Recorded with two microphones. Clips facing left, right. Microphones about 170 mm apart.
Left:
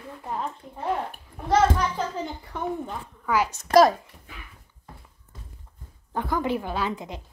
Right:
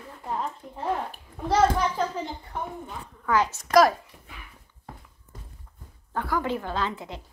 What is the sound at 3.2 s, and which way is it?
Speech, 10° left (ahead or behind).